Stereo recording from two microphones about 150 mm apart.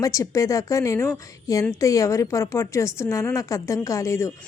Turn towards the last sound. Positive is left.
turn(degrees=20)  # may be behind; listen again after turning